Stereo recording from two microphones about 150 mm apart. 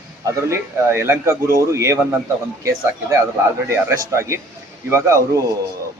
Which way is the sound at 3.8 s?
20° right (ahead or behind).